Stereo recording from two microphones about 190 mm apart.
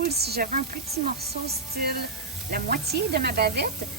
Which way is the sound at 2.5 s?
55° right (ahead or behind).